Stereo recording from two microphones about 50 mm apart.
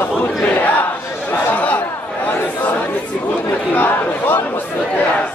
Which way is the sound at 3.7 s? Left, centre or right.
Left.